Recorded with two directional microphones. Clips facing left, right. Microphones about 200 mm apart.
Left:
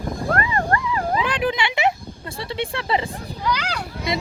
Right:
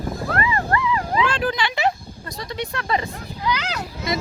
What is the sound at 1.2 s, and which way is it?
Speech, 20° left (ahead or behind).